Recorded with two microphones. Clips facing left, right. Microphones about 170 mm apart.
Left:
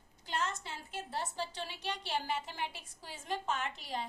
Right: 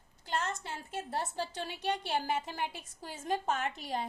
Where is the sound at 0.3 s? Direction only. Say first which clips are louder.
Right 2 dB; 50° right (ahead or behind).